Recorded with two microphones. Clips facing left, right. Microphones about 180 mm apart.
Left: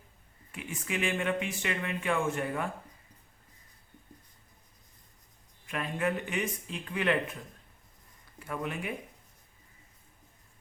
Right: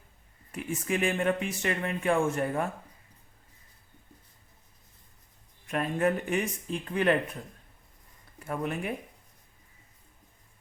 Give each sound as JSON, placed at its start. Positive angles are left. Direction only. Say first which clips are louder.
{"t": 0.5, "sound": "speech", "louder": "right 5 dB", "side_deg": -45}
{"t": 5.7, "sound": "speech", "louder": "right 5 dB", "side_deg": -40}
{"t": 8.4, "sound": "speech", "louder": "right 3 dB", "side_deg": -45}